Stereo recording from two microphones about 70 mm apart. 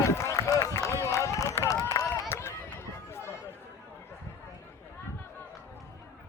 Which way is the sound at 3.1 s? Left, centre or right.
Left.